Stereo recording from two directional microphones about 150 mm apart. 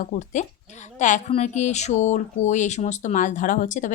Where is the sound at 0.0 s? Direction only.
55° left (ahead or behind).